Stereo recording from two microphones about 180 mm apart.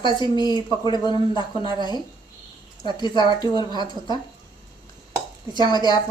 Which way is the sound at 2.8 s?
25° left (ahead or behind).